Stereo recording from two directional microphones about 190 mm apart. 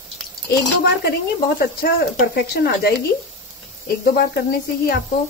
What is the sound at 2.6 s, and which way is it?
Speech, 55° left (ahead or behind).